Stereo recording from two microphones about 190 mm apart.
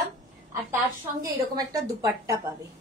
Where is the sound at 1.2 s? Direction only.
20° right (ahead or behind).